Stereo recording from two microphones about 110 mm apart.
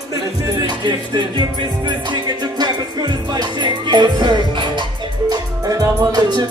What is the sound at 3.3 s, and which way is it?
Music, 45° right (ahead or behind).